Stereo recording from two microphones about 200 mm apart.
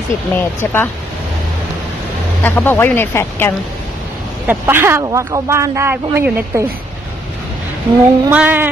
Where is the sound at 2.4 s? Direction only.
10° left (ahead or behind).